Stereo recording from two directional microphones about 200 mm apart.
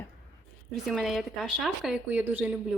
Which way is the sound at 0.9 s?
Centre (ahead or behind).